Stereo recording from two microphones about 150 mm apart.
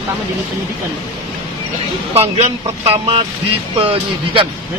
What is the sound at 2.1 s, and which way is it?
Speech, 40° right (ahead or behind).